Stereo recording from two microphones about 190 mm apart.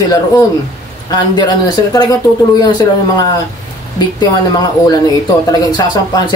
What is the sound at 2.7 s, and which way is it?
A woman's voice, 20° left (ahead or behind).